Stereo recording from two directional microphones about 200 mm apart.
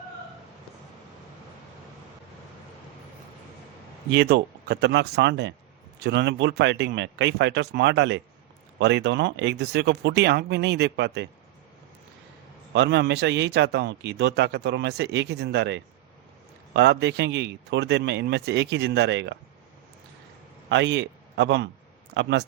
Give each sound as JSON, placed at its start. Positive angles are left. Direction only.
{"t": 4.1, "sound": "a man's voice", "side_deg": -50}
{"t": 12.7, "sound": "a man's voice", "side_deg": -60}
{"t": 20.7, "sound": "a man's voice", "side_deg": -60}